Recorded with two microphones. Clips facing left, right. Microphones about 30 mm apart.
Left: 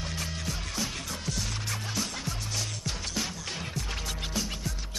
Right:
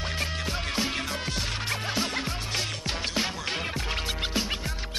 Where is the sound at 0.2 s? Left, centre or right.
Right.